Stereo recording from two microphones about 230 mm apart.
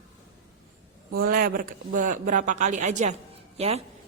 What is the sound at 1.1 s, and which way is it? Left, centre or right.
A woman's voice, right.